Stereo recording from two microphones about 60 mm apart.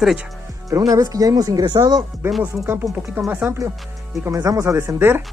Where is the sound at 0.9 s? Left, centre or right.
Right.